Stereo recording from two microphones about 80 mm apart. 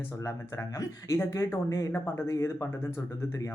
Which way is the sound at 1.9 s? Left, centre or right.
Left.